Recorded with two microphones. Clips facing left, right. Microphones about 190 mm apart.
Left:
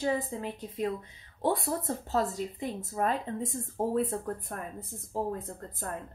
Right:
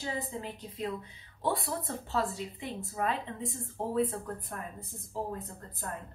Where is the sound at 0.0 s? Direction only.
50° left (ahead or behind).